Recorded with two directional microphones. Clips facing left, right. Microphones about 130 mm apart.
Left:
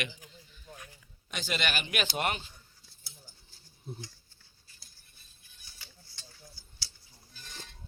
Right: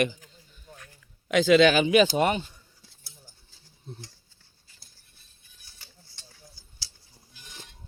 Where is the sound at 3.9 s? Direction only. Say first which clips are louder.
Left 1 dB; 10° left (ahead or behind).